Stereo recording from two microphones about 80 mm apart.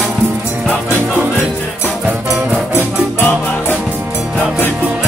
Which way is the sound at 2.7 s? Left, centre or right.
Left.